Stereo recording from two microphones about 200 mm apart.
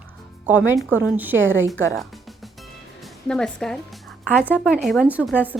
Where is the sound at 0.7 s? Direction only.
5° right (ahead or behind).